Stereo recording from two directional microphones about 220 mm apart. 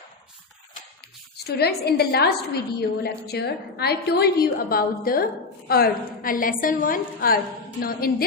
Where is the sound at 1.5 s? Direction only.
45° left (ahead or behind).